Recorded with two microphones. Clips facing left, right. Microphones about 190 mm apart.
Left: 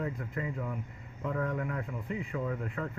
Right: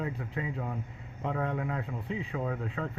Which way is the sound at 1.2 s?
80° right.